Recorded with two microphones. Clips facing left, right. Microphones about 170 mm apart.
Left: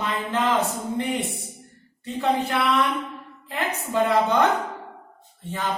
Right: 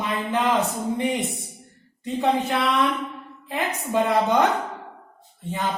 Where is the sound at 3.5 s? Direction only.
15° right (ahead or behind).